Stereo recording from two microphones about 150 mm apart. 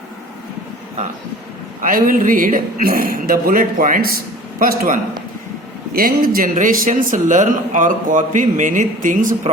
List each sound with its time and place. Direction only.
1.8 s a man's voice: 70° right (ahead or behind)